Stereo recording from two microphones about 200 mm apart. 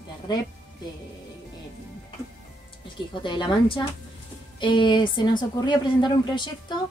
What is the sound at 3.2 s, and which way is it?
Speech, 25° left (ahead or behind).